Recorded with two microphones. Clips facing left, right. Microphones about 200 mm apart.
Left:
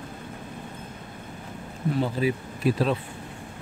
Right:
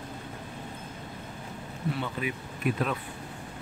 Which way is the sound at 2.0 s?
35° left (ahead or behind).